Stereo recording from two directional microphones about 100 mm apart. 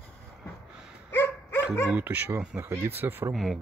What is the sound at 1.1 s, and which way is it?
Dog, 20° left (ahead or behind).